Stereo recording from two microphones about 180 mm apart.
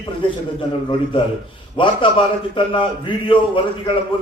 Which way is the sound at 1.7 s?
30° left (ahead or behind).